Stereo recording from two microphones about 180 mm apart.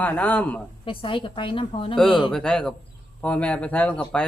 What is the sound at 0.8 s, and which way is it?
A woman's voice, 30° left (ahead or behind).